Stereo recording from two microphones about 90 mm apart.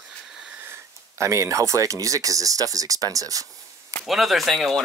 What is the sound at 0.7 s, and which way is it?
Speech, 35° right (ahead or behind).